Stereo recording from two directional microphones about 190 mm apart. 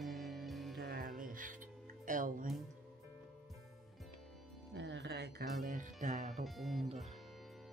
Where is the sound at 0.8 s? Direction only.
50° right (ahead or behind).